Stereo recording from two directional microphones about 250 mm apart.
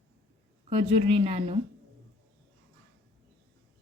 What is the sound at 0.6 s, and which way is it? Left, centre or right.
Speech, right.